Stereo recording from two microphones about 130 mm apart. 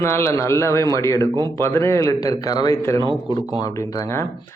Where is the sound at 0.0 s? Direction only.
20° left (ahead or behind).